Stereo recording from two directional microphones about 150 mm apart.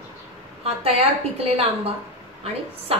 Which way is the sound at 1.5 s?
40° right (ahead or behind).